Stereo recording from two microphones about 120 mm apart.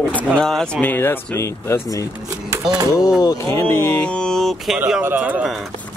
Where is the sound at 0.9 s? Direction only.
20° left (ahead or behind).